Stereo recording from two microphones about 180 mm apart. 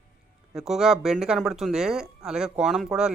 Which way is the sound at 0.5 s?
Centre (ahead or behind).